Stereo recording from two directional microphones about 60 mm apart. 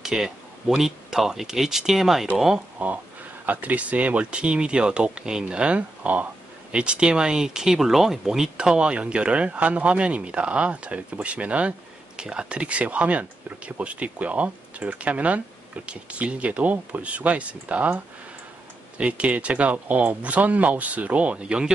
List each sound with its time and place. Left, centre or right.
0.0 s speech: centre
3.4 s speech: right